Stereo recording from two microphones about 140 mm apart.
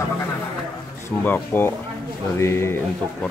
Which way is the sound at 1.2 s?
15° left (ahead or behind).